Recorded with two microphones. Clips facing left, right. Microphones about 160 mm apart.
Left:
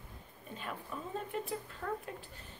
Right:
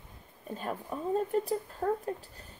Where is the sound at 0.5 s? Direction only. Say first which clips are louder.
Right 6 dB; 40° right (ahead or behind).